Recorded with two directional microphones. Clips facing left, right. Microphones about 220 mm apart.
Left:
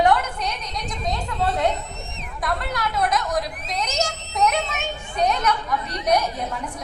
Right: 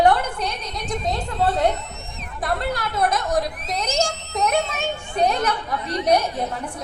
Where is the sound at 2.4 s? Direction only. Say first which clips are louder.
Right 2 dB; 30° right (ahead or behind).